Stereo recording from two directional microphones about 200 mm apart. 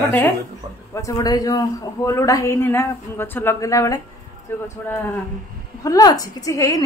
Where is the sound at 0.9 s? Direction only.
15° left (ahead or behind).